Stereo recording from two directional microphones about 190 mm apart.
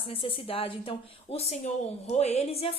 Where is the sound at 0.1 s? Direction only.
30° left (ahead or behind).